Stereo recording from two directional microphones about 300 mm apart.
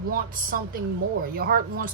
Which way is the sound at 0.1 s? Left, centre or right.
Right.